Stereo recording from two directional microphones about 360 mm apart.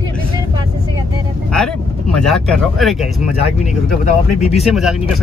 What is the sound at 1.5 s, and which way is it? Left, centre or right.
Speech, centre.